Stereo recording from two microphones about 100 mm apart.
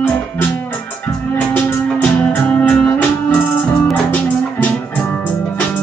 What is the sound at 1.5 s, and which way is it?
Music, 15° left (ahead or behind).